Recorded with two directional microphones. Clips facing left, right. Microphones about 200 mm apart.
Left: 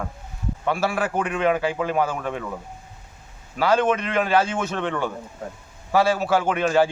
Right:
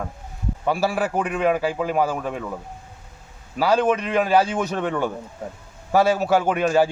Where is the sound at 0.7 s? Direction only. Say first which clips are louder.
Right 2 dB; 35° right (ahead or behind).